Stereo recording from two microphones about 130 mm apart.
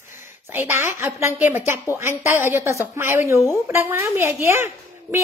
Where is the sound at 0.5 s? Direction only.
20° right (ahead or behind).